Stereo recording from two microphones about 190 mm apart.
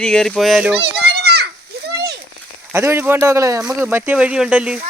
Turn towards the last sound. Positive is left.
turn(degrees=-5)  # may be behind; listen again after turning